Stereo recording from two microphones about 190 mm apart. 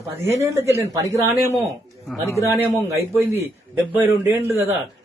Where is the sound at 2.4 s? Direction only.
15° right (ahead or behind).